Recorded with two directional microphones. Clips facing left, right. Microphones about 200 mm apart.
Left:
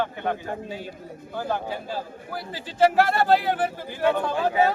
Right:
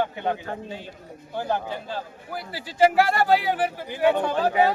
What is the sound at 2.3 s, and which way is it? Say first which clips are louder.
Speech: right 1 dB; 10° right (ahead or behind).